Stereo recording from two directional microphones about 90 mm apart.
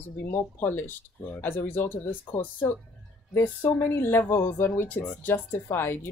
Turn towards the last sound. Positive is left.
turn(degrees=25)  # may be behind; listen again after turning